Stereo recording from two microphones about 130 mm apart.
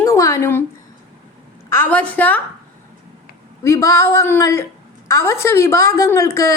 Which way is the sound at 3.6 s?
25° left (ahead or behind).